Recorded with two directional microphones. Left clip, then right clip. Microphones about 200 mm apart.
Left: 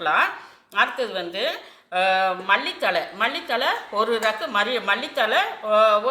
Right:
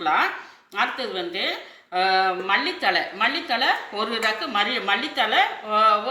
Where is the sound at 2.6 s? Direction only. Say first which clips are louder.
Right 1 dB; 45° left (ahead or behind).